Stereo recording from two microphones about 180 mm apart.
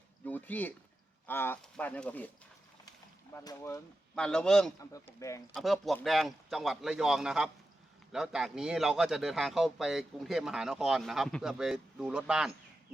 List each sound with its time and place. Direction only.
0.3 s speech: 10° left (ahead or behind)
3.3 s speech: 15° left (ahead or behind)
4.1 s a man's voice: 5° left (ahead or behind)
4.8 s speech: 15° left (ahead or behind)
5.5 s a man's voice: centre (ahead or behind)